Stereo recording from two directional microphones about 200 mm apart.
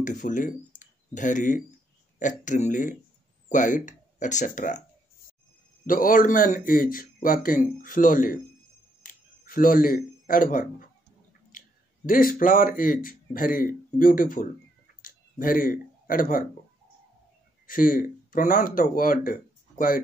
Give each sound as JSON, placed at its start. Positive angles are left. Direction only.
{"t": 0.0, "sound": "speech", "side_deg": 40}
{"t": 5.9, "sound": "speech", "side_deg": 40}
{"t": 9.0, "sound": "a sound", "side_deg": 45}
{"t": 11.5, "sound": "clicking", "side_deg": 40}
{"t": 12.1, "sound": "speech", "side_deg": 45}
{"t": 15.0, "sound": "a sound", "side_deg": 45}
{"t": 17.6, "sound": "speech", "side_deg": 45}